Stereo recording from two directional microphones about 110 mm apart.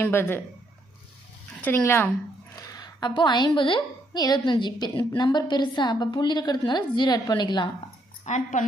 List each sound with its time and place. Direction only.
0.0 s speech: 20° left (ahead or behind)
1.6 s speech: 20° left (ahead or behind)
2.6 s a woman's voice: 35° left (ahead or behind)
8.3 s a woman's voice: 90° left